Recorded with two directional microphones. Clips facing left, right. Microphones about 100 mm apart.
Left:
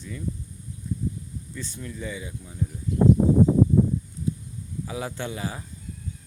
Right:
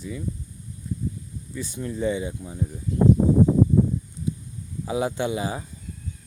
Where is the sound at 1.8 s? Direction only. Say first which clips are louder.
Right 11 dB; 30° right (ahead or behind).